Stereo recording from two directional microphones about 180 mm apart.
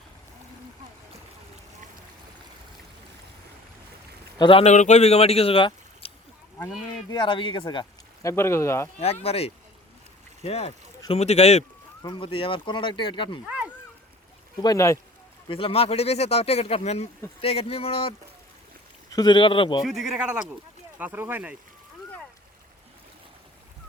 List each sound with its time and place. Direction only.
4.4 s speech: 30° left (ahead or behind)
7.1 s speech: 25° left (ahead or behind)
9.0 s speech: 35° left (ahead or behind)
14.6 s speech: 20° left (ahead or behind)
15.4 s speech: 30° left (ahead or behind)
19.1 s speech: 25° left (ahead or behind)
19.8 s speech: centre (ahead or behind)